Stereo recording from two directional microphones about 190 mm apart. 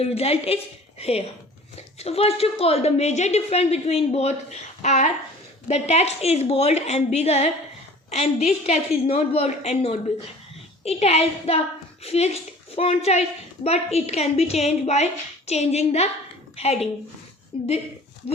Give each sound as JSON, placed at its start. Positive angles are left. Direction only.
{"t": 0.0, "sound": "a woman's voice", "side_deg": 30}